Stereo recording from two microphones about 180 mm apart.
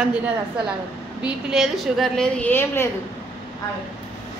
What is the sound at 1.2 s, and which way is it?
A woman's voice, centre (ahead or behind).